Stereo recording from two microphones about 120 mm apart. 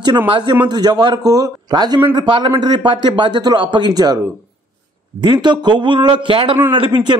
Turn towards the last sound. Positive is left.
turn(degrees=-40)  # may be behind; listen again after turning